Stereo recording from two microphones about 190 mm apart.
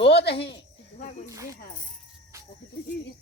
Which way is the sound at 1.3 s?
15° right (ahead or behind).